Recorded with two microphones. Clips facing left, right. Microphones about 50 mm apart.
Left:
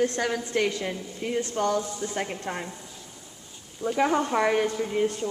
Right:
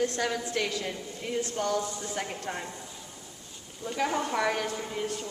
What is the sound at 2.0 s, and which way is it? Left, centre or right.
Speech, centre.